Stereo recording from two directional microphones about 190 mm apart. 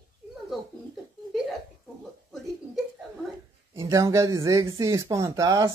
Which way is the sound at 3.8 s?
15° right (ahead or behind).